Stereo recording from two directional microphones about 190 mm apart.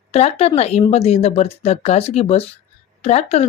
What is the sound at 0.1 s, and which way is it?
Speech, 35° left (ahead or behind).